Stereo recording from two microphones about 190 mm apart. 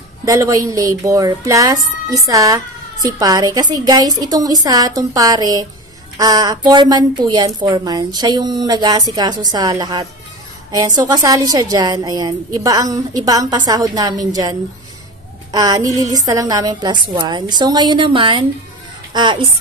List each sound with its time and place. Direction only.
0.2 s speech: 15° right (ahead or behind)